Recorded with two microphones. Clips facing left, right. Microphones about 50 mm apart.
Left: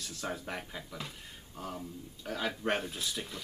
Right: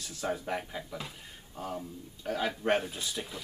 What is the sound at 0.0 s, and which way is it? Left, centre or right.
Speech, centre.